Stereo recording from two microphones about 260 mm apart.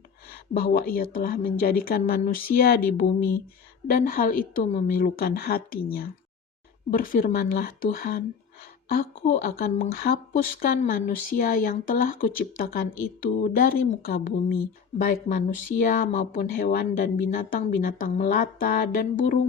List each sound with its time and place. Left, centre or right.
0.3 s speech: left
3.8 s speech: left